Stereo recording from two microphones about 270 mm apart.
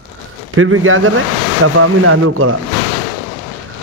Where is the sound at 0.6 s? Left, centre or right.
Right.